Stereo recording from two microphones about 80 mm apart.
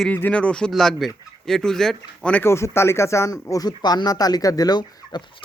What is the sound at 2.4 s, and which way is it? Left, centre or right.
Speech, left.